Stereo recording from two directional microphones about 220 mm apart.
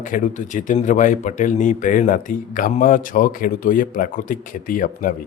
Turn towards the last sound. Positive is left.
turn(degrees=40)  # may be behind; listen again after turning